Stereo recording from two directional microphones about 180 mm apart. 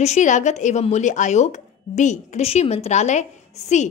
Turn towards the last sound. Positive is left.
turn(degrees=40)  # may be behind; listen again after turning